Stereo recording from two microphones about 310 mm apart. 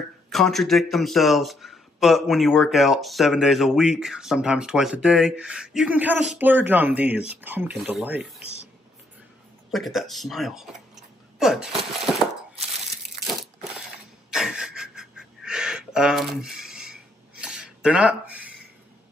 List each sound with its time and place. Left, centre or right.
0.3 s speech: centre
9.7 s speech: centre
14.3 s a sound: centre